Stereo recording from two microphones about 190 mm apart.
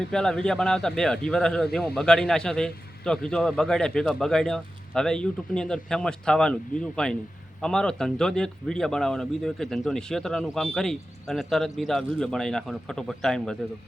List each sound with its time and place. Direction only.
0.1 s speech: 5° left (ahead or behind)